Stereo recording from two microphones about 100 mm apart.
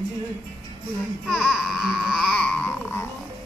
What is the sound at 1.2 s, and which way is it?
Baby cry, 5° right (ahead or behind).